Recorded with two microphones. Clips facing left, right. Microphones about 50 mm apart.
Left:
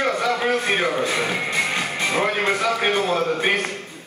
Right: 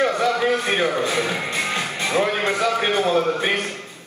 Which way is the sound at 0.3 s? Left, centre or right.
Left.